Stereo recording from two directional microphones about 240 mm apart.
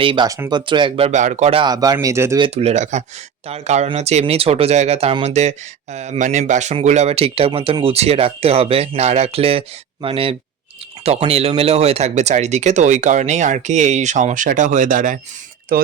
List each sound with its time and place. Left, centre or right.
0.0 s speech: centre
2.6 s speech: right